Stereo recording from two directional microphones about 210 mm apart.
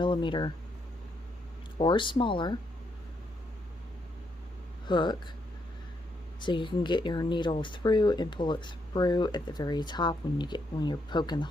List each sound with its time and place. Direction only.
0.0 s speech: 20° left (ahead or behind)
1.8 s speech: 20° left (ahead or behind)
4.9 s speech: 20° left (ahead or behind)
6.4 s speech: 20° left (ahead or behind)